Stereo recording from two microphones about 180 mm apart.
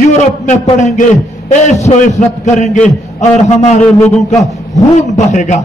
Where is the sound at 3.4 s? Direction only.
40° left (ahead or behind).